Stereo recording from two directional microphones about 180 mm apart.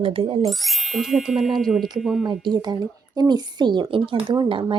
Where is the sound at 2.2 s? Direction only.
25° right (ahead or behind).